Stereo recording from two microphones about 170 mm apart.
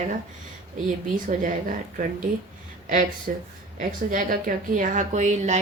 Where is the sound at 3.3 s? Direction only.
55° right (ahead or behind).